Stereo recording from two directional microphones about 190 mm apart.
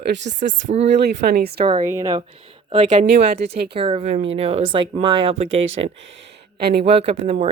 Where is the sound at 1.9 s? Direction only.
20° right (ahead or behind).